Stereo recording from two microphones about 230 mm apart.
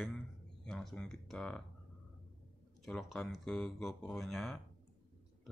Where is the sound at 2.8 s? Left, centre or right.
Centre.